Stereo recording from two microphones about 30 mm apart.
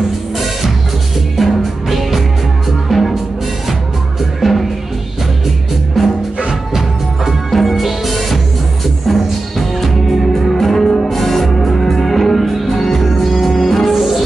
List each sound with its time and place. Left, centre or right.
1.3 s music: centre
4.4 s music: centre
6.0 s music: centre
7.2 s music: centre